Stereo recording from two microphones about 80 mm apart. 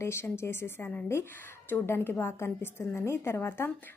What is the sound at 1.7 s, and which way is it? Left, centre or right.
A woman's voice, left.